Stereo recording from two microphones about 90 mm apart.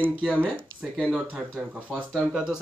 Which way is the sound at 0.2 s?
15° right (ahead or behind).